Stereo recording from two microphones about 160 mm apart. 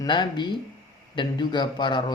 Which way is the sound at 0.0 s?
30° left (ahead or behind).